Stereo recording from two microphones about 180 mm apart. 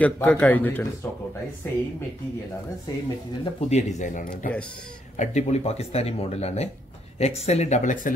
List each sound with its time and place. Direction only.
0.0 s a man's voice: 10° left (ahead or behind)
3.6 s speech: 40° left (ahead or behind)